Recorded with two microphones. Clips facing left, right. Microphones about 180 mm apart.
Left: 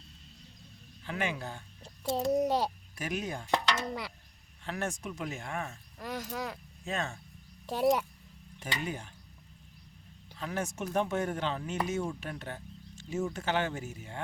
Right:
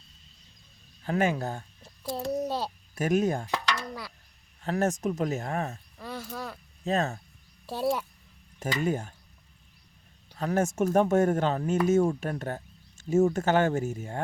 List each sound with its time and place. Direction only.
1.0 s speech: 45° right (ahead or behind)
1.8 s a child's voice: 15° left (ahead or behind)
2.9 s speech: 45° right (ahead or behind)
3.5 s a sound: 25° left (ahead or behind)
4.6 s speech: 40° right (ahead or behind)
6.0 s speech: 10° left (ahead or behind)
6.8 s speech: 40° right (ahead or behind)
7.7 s speech: 15° left (ahead or behind)
8.5 s speech: 45° right (ahead or behind)
10.3 s speech: 45° right (ahead or behind)